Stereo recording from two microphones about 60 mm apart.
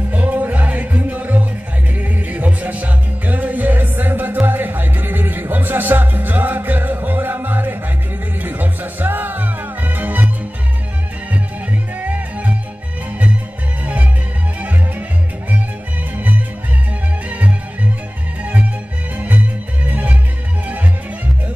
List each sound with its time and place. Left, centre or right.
0.1 s music: right
12.0 s music: right
14.6 s music: right
17.3 s music: right